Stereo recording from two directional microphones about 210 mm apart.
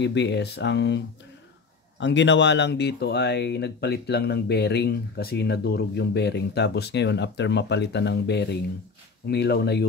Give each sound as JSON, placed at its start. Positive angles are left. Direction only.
{"t": 0.0, "sound": "speech", "side_deg": 55}